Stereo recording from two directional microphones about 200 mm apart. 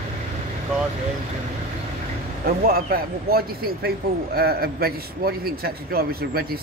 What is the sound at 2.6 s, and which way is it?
Speech, 45° right (ahead or behind).